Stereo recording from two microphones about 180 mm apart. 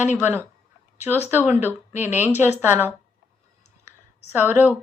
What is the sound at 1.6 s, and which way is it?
Speech, 10° right (ahead or behind).